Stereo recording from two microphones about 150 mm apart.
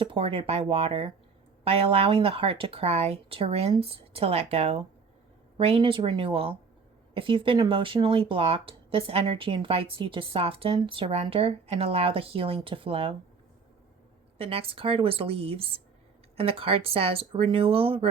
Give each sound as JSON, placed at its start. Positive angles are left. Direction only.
{"t": 0.0, "sound": "speech", "side_deg": -35}
{"t": 14.3, "sound": "speech", "side_deg": -40}